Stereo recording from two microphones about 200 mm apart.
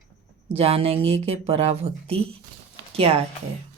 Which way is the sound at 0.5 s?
30° right (ahead or behind).